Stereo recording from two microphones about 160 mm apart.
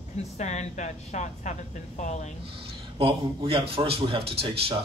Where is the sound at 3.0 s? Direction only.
35° right (ahead or behind).